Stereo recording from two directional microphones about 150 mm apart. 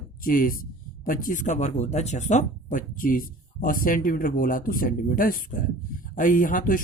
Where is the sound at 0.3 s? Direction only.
70° left (ahead or behind).